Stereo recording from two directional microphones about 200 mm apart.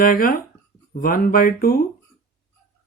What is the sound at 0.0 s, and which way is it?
Speech, 45° left (ahead or behind).